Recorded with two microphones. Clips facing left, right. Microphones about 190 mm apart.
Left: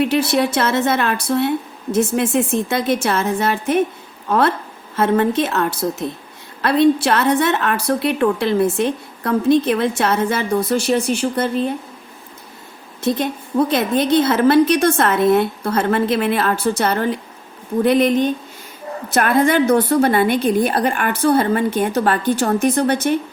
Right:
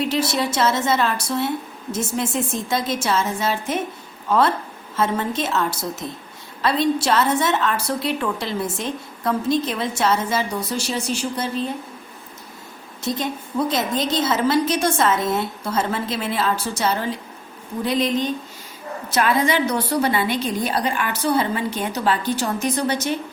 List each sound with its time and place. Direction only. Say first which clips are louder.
0.0 s a woman's voice: left 5 dB; 60° left (ahead or behind)
13.0 s a woman's voice: left 5 dB; 60° left (ahead or behind)